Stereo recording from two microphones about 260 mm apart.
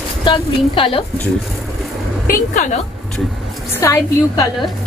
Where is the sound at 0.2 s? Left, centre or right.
Centre.